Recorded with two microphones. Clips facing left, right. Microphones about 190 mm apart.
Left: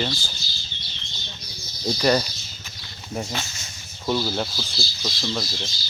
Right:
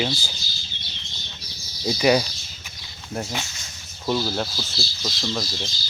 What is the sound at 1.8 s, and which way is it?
Speech, 5° right (ahead or behind).